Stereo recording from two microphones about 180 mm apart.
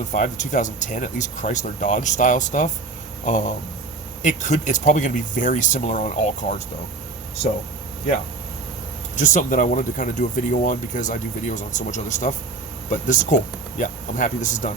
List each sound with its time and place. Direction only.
0.1 s speech: 45° left (ahead or behind)
4.2 s speech: 40° left (ahead or behind)
9.1 s speech: 45° left (ahead or behind)